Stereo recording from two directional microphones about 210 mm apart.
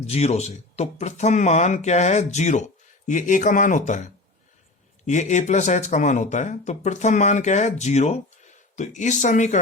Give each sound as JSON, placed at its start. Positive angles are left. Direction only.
{"t": 0.0, "sound": "speech", "side_deg": 30}
{"t": 5.0, "sound": "speech", "side_deg": 35}